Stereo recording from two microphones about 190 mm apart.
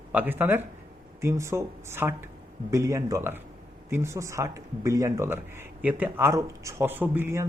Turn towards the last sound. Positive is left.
turn(degrees=-15)  # may be behind; listen again after turning